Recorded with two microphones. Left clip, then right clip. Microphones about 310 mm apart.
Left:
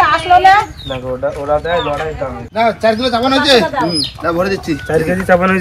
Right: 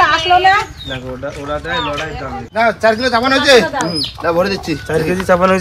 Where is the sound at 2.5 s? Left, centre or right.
Centre.